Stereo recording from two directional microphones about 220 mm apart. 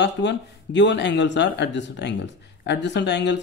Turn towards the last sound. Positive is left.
turn(degrees=50)  # may be behind; listen again after turning